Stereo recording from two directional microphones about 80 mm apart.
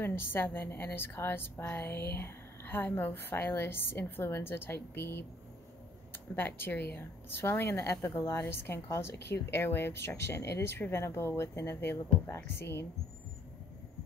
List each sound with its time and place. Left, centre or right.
0.0 s a woman's voice: left